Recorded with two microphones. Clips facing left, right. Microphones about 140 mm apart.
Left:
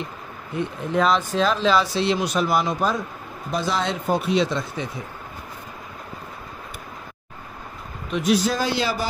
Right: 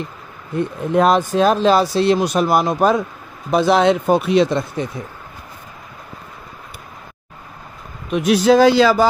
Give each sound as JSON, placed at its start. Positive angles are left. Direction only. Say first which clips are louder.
{"t": 0.6, "sound": "speech", "louder": "right 6 dB", "side_deg": -50}
{"t": 3.5, "sound": "speech", "louder": "right 11 dB", "side_deg": -65}
{"t": 8.1, "sound": "speech", "louder": "right 8 dB", "side_deg": -60}